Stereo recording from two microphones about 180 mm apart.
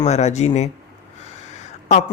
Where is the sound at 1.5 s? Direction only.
40° left (ahead or behind).